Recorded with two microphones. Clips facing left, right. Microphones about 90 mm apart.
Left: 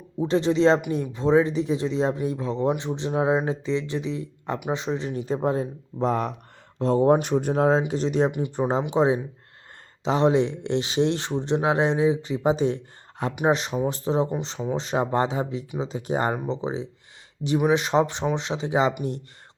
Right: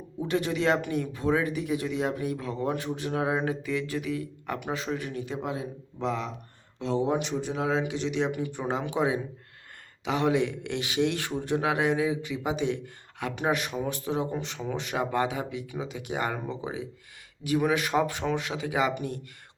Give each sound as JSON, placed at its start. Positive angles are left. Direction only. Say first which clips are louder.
{"t": 0.2, "sound": "speech", "louder": "left 7 dB", "side_deg": 25}
{"t": 8.3, "sound": "speech", "louder": "left 3 dB", "side_deg": 25}
{"t": 8.5, "sound": "speech", "louder": "left 9 dB", "side_deg": 35}